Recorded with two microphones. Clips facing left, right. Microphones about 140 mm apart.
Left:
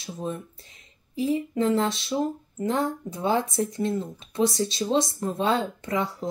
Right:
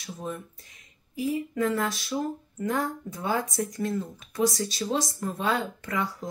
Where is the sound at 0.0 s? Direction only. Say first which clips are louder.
Left 3 dB; 25° left (ahead or behind).